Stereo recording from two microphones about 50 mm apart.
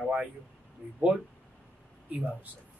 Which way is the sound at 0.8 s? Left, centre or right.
Right.